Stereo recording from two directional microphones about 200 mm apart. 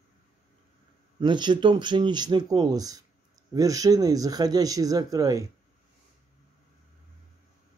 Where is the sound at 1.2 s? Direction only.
20° right (ahead or behind).